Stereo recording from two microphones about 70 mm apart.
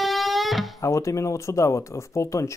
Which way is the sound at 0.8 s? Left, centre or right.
Left.